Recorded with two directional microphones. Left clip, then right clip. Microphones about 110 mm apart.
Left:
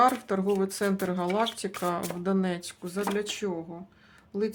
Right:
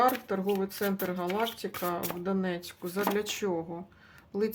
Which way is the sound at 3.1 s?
10° right (ahead or behind).